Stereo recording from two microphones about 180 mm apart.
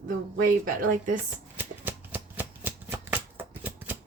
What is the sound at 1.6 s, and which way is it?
Shuffling cards, 10° right (ahead or behind).